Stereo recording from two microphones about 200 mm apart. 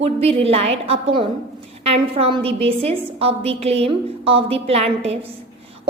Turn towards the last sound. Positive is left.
turn(degrees=-30)  # may be behind; listen again after turning